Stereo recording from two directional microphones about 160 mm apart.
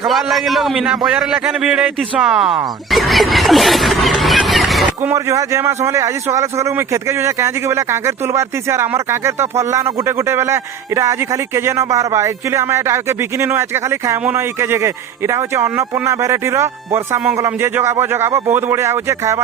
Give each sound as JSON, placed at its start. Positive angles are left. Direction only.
{"t": 0.0, "sound": "a man's voice", "side_deg": 0}
{"t": 2.9, "sound": "a sound", "side_deg": 0}
{"t": 5.0, "sound": "a man's voice", "side_deg": -20}